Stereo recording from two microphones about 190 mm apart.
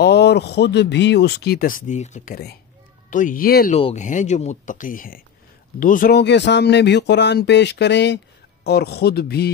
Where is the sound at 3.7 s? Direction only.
35° left (ahead or behind).